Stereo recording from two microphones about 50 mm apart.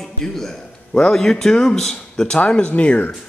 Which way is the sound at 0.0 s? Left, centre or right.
Centre.